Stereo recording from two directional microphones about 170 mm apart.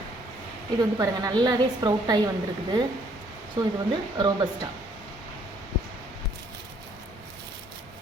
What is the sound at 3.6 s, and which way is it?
A woman's voice, 25° right (ahead or behind).